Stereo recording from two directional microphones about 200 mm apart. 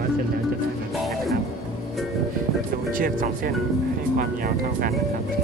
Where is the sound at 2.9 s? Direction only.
45° right (ahead or behind).